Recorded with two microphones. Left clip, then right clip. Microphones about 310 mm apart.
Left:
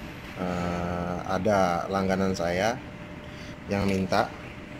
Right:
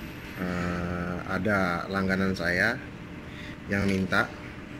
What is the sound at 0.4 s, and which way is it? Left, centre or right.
Speech, left.